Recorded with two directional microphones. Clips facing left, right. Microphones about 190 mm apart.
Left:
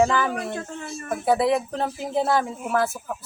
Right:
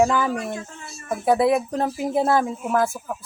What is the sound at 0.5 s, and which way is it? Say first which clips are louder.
Speech: left 2 dB; 55° left (ahead or behind).